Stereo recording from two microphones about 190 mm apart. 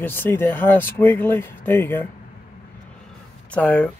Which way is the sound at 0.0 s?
10° left (ahead or behind).